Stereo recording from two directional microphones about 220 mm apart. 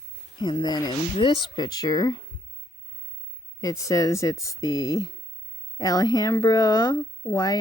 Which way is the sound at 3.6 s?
15° left (ahead or behind).